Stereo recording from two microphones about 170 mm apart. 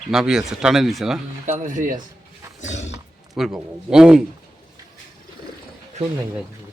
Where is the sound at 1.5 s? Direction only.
50° right (ahead or behind).